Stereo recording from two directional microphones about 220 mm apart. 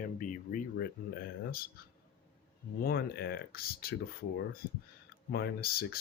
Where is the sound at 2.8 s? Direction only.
45° left (ahead or behind).